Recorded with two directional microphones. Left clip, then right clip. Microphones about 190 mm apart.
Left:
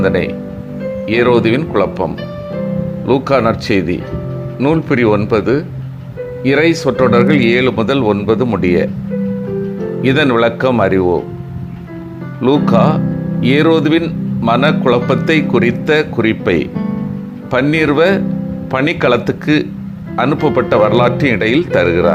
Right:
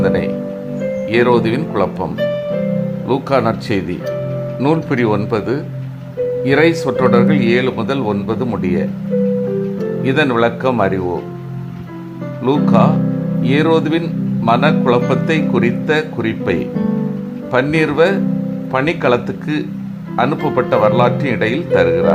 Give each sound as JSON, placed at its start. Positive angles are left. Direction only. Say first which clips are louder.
{"t": 0.0, "sound": "speech", "louder": "left 1 dB", "side_deg": 15}
{"t": 3.1, "sound": "speech", "louder": "left 3 dB", "side_deg": 10}
{"t": 10.0, "sound": "speech", "louder": "left 3 dB", "side_deg": 20}
{"t": 12.4, "sound": "speech", "louder": "left 2 dB", "side_deg": 20}